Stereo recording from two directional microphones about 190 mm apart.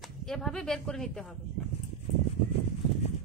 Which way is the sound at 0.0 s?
Centre (ahead or behind).